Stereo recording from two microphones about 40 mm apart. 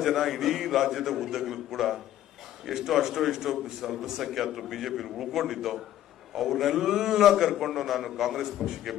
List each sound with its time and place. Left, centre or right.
0.0 s a man's voice: centre